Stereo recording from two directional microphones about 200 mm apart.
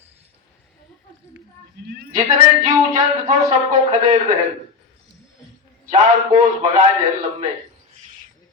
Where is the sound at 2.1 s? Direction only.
40° right (ahead or behind).